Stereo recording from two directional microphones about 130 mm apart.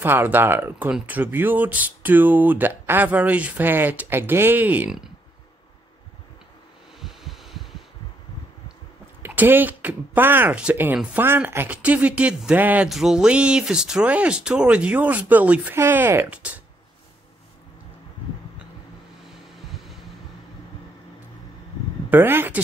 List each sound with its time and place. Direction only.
0.0 s speech: 15° right (ahead or behind)
7.0 s heart sounds: centre (ahead or behind)
9.2 s speech: 15° right (ahead or behind)
19.6 s vehicle: centre (ahead or behind)
22.1 s speech: 15° right (ahead or behind)